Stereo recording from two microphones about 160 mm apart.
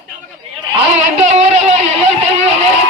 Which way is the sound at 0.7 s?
45° right (ahead or behind).